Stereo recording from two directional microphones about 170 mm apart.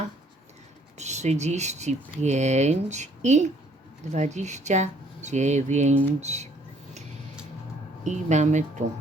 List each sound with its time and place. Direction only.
0.9 s speech: 40° right (ahead or behind)
5.9 s speech: 10° right (ahead or behind)
6.1 s speech: 40° right (ahead or behind)
8.0 s speech: 45° right (ahead or behind)